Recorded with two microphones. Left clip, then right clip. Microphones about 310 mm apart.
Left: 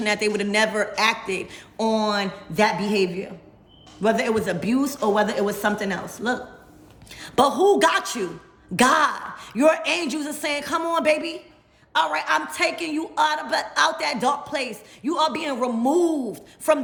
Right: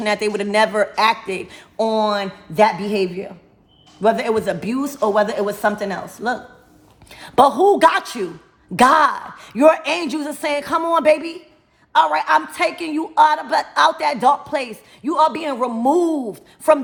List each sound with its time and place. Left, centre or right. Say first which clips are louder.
0.0 s speech: right 3 dB; centre